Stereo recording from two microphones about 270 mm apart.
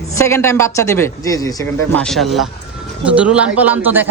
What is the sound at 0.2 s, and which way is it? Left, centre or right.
A man's voice, centre.